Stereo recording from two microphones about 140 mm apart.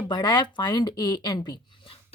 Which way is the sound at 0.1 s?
30° left (ahead or behind).